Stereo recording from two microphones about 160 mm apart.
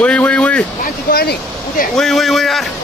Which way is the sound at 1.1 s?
75° left (ahead or behind).